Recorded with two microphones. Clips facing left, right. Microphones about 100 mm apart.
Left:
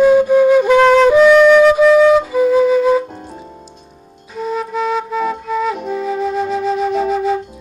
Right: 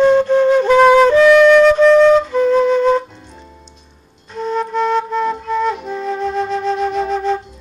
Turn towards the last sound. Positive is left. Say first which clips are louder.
# left 2 dB
turn(degrees=5)  # may be behind; listen again after turning